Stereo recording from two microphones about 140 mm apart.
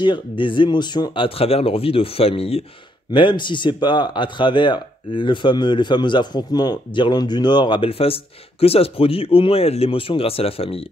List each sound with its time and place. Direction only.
0.0 s speech: 35° left (ahead or behind)